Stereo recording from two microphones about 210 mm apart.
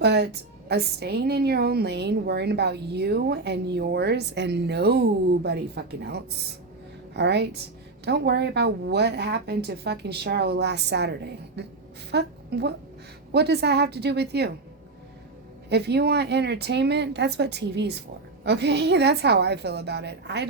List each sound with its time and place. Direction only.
0.0 s a woman's voice: 55° right (ahead or behind)
15.7 s a woman's voice: 50° right (ahead or behind)